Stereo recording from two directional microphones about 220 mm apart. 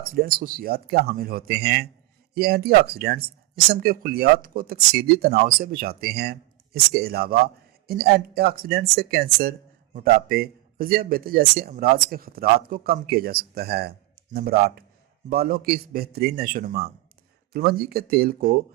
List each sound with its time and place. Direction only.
0.0 s a man's voice: 45° right (ahead or behind)